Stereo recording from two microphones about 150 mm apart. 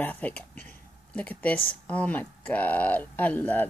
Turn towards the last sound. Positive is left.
turn(degrees=10)  # may be behind; listen again after turning